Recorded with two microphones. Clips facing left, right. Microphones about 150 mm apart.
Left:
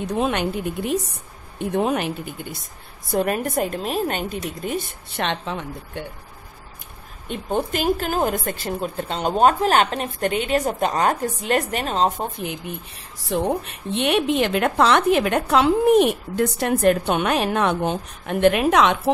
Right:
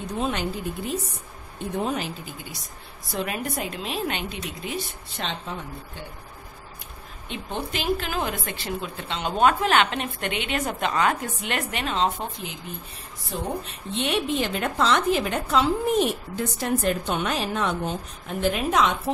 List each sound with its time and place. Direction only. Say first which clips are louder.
0.2 s a woman's voice: left 4 dB; 65° left (ahead or behind)
3.1 s a woman's voice: left 7 dB; 45° left (ahead or behind); by 6.0 s 80° left
7.2 s speech: left 7 dB; 45° left (ahead or behind)
13.2 s a woman's voice: left 8 dB; 70° left (ahead or behind)